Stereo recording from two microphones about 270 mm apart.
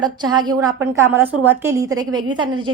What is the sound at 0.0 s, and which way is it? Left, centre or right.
A woman's voice, centre.